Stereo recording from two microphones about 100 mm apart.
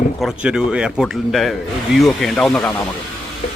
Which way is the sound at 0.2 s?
5° right (ahead or behind).